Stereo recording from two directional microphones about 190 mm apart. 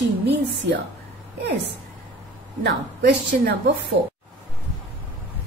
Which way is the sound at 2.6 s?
60° right (ahead or behind).